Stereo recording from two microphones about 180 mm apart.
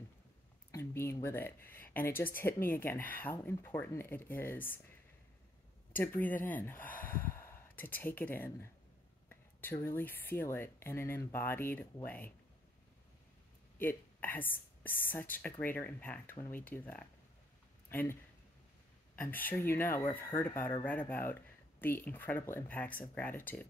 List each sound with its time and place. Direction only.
0.7 s speech: 15° left (ahead or behind)
5.9 s speech: 10° left (ahead or behind)
7.0 s snort: 10° left (ahead or behind)
7.3 s speech: 10° left (ahead or behind)
13.7 s speech: 10° left (ahead or behind)
19.1 s speech: 10° left (ahead or behind)